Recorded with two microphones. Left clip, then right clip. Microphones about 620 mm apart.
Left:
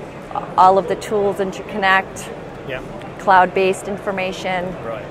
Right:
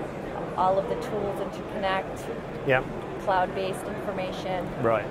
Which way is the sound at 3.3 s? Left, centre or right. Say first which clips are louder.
Left 13 dB; left.